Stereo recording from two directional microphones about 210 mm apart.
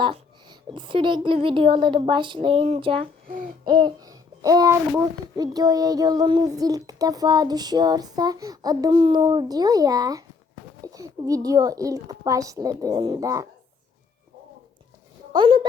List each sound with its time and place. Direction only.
0.0 s a woman's voice: 20° right (ahead or behind)
15.4 s a woman's voice: 25° right (ahead or behind)